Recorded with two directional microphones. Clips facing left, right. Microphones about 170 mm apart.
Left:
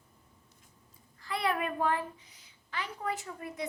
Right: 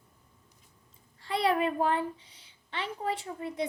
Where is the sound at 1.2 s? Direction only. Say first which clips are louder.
Right 5 dB; 30° right (ahead or behind).